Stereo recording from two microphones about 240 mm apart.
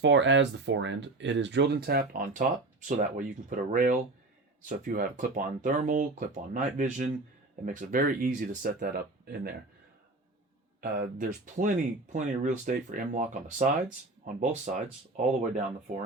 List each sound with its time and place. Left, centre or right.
0.0 s speech: right
10.8 s speech: right